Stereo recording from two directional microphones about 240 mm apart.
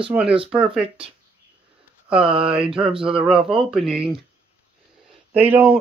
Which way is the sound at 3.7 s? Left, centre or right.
Centre.